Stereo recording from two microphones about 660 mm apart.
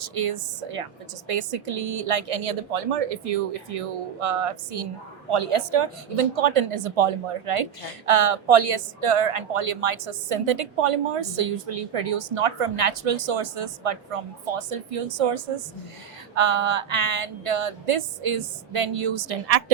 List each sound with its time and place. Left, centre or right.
0.0 s speech: right